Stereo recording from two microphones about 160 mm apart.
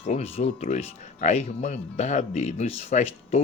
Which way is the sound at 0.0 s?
45° left (ahead or behind).